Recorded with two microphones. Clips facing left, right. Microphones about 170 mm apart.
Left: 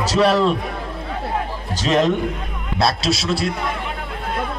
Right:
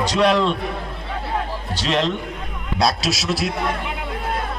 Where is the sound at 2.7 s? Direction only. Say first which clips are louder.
Left 1 dB; centre (ahead or behind).